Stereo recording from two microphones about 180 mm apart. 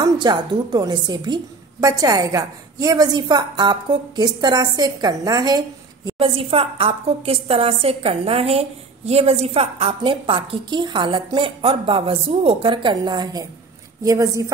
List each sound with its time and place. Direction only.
0.0 s a woman's voice: 25° right (ahead or behind)